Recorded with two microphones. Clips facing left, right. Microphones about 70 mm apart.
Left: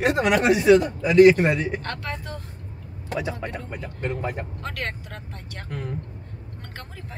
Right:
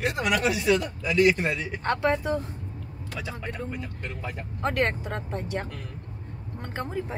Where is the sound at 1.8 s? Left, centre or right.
Right.